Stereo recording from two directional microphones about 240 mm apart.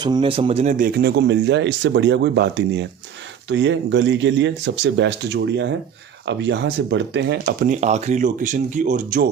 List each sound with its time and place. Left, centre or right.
0.0 s speech: centre; by 7.3 s right
7.4 s speech: right